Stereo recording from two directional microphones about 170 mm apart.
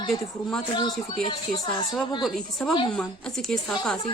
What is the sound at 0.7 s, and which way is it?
Speech, 25° left (ahead or behind).